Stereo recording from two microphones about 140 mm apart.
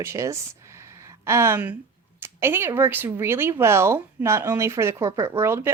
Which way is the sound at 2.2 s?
15° right (ahead or behind).